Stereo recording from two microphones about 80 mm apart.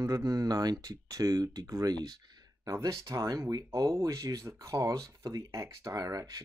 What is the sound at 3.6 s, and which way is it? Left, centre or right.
Speech, right.